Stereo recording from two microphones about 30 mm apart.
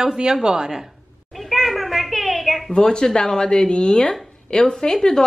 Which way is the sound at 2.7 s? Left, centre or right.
Left.